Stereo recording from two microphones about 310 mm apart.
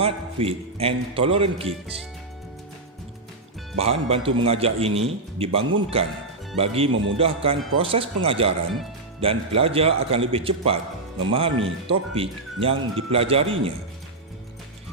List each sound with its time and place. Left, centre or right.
0.0 s speech: centre
3.8 s speech: centre